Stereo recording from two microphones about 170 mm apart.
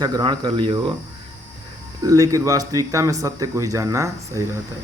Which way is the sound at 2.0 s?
20° right (ahead or behind).